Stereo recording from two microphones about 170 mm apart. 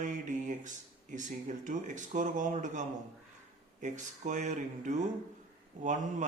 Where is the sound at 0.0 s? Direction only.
45° right (ahead or behind).